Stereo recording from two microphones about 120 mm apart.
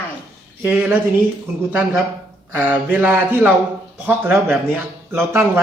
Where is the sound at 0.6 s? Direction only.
15° right (ahead or behind).